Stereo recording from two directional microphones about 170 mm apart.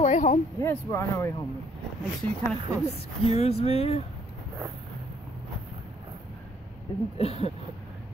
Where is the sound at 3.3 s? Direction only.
35° left (ahead or behind).